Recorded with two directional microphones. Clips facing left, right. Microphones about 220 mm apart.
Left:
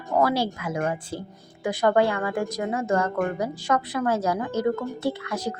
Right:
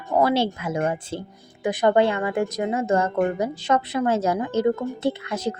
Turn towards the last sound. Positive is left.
turn(degrees=-25)  # may be behind; listen again after turning